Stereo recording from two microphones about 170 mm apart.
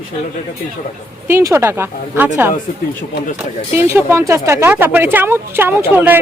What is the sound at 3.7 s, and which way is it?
Speech, 15° right (ahead or behind).